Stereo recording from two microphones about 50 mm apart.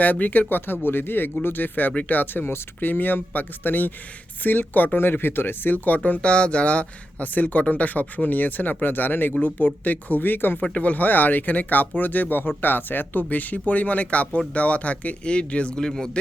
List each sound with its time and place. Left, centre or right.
0.0 s speech: left
5.7 s speech: left
10.6 s speech: left
15.8 s speech: centre